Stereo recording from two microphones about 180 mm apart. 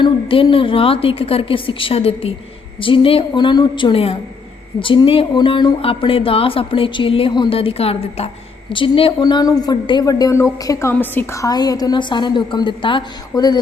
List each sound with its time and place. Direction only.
0.0 s a woman's voice: 25° left (ahead or behind)